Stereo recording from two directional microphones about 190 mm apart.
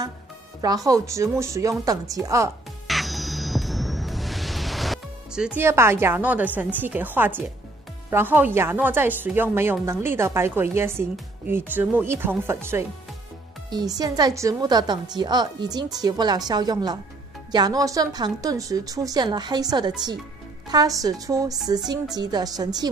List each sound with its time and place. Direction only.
0.6 s a woman's voice: 20° right (ahead or behind)
2.9 s music: centre (ahead or behind)
8.1 s a woman's voice: 10° right (ahead or behind)
13.9 s a woman's voice: 20° right (ahead or behind)